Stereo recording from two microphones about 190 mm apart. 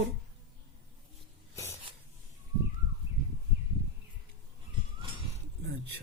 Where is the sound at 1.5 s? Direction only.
15° left (ahead or behind).